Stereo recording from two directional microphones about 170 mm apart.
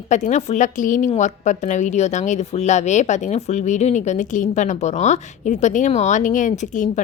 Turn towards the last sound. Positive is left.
turn(degrees=45)  # may be behind; listen again after turning